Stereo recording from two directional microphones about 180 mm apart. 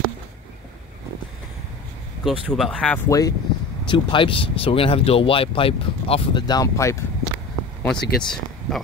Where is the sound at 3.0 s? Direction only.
15° left (ahead or behind).